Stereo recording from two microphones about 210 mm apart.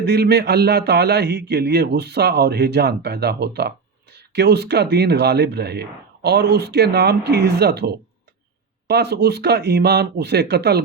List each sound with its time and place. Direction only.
0.0 s speech: 50° right (ahead or behind)